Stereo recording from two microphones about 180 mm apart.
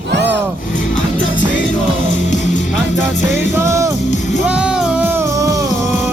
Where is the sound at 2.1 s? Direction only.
45° left (ahead or behind).